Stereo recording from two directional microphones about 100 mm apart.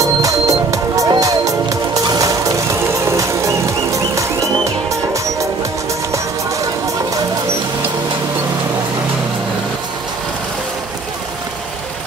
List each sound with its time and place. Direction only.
0.0 s music: 35° right (ahead or behind)